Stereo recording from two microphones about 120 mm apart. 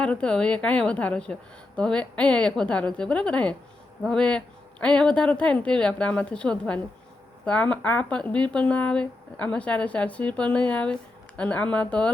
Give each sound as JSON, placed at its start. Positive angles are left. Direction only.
{"t": 0.0, "sound": "speech", "side_deg": 10}